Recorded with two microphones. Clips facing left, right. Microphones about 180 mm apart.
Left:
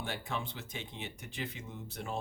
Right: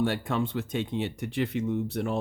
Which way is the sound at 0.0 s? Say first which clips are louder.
Right 12 dB; 65° right (ahead or behind).